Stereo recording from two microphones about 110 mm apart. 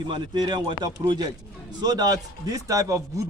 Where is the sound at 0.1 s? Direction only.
45° right (ahead or behind).